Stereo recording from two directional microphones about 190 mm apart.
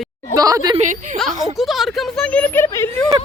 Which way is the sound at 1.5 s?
Centre (ahead or behind).